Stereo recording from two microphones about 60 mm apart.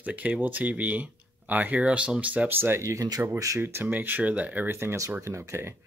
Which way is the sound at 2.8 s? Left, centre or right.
Right.